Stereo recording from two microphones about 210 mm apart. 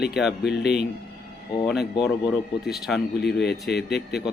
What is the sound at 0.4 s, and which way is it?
Speech, 55° left (ahead or behind).